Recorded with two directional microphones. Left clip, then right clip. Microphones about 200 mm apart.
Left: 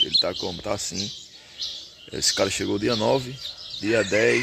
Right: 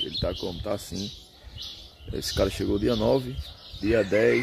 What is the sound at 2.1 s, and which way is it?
Speech, centre (ahead or behind).